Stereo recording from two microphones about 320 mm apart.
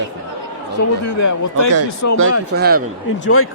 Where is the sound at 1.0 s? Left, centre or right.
Left.